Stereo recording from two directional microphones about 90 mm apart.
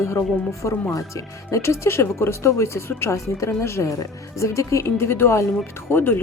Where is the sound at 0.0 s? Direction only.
30° left (ahead or behind).